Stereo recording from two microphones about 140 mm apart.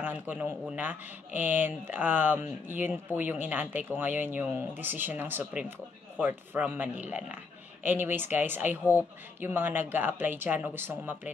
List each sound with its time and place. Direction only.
0.0 s speech: 15° right (ahead or behind)